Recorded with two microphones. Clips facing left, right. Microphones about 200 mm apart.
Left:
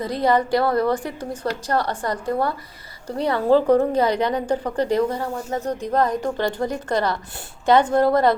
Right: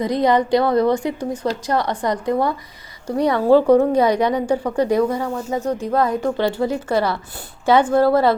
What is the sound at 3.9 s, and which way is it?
A woman's voice, 10° right (ahead or behind).